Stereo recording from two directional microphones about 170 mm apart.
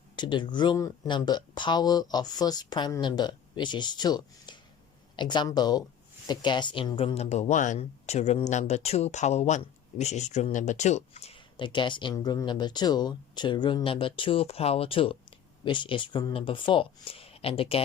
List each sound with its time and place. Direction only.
0.2 s speech: 25° left (ahead or behind)